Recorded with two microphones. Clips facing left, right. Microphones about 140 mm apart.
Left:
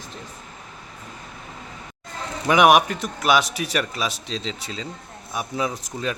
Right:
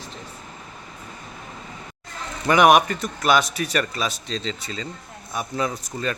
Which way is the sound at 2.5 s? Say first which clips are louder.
Even; 5° left (ahead or behind).